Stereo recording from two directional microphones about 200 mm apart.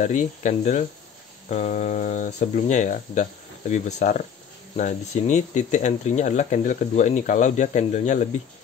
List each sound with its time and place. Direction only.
0.0 s speech: 35° left (ahead or behind)